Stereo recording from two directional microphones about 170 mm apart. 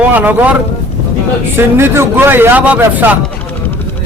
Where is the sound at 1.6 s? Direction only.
15° right (ahead or behind).